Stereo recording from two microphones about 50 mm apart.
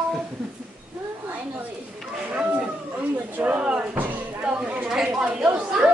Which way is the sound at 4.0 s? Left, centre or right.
Right.